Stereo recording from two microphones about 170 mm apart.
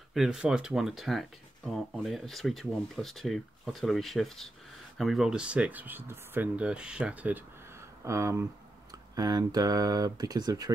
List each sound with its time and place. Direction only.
0.1 s speech: centre (ahead or behind); by 10.7 s 25° right (ahead or behind)